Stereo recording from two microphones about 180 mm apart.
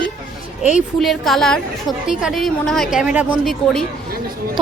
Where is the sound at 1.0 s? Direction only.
Centre (ahead or behind).